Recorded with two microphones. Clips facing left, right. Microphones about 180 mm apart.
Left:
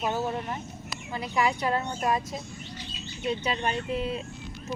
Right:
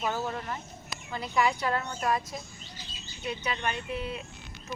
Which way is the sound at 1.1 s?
15° left (ahead or behind).